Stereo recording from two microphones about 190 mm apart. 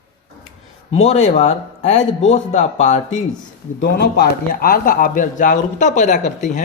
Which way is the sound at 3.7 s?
60° left (ahead or behind).